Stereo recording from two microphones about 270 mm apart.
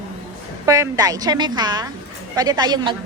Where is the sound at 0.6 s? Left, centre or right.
Centre.